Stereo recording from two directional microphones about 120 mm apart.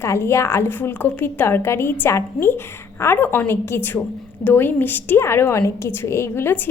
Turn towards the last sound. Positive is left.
turn(degrees=20)  # may be behind; listen again after turning